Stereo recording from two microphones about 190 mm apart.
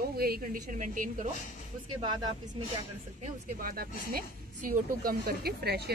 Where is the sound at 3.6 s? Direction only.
50° right (ahead or behind).